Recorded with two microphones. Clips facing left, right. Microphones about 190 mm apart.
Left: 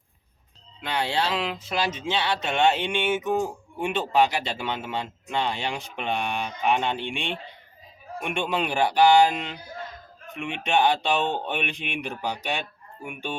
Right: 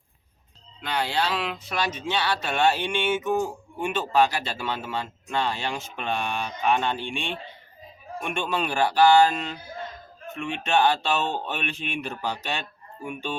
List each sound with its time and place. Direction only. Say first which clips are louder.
0.8 s speech: even; 25° left (ahead or behind)